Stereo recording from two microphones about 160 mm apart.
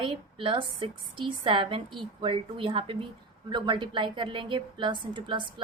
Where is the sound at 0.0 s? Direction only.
30° right (ahead or behind).